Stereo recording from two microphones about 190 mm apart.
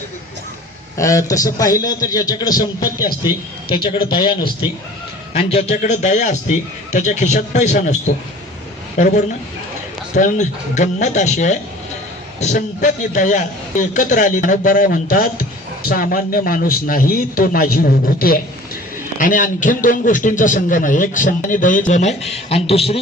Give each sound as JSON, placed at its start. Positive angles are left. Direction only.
{"t": 0.9, "sound": "a man's voice", "side_deg": 15}
{"t": 5.3, "sound": "a man's voice", "side_deg": 35}